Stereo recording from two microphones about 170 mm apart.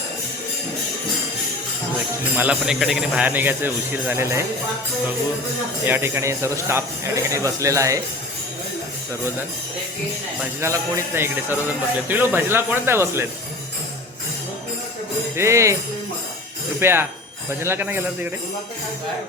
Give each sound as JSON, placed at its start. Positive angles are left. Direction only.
{"t": 2.3, "sound": "speech", "side_deg": -10}
{"t": 5.8, "sound": "speech", "side_deg": -15}
{"t": 10.6, "sound": "speech", "side_deg": -15}
{"t": 15.4, "sound": "speech", "side_deg": -15}
{"t": 16.8, "sound": "speech", "side_deg": -15}